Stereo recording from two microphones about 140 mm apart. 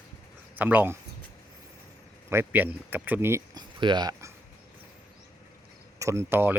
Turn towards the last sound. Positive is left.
turn(degrees=-15)  # may be behind; listen again after turning